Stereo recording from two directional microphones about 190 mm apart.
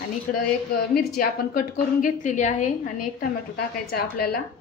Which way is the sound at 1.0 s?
50° left (ahead or behind).